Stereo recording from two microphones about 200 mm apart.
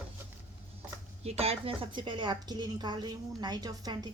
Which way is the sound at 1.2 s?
30° right (ahead or behind).